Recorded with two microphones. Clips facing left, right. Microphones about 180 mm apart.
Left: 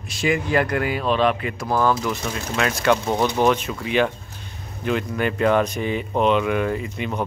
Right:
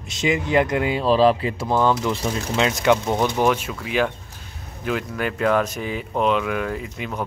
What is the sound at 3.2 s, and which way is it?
Speech, 5° right (ahead or behind).